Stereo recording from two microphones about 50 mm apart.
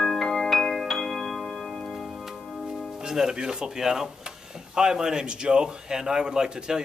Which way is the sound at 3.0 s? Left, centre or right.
Centre.